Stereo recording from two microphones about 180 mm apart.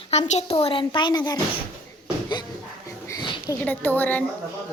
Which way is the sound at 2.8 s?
20° left (ahead or behind).